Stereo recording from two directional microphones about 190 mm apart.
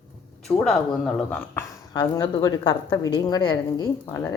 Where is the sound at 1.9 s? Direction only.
20° left (ahead or behind).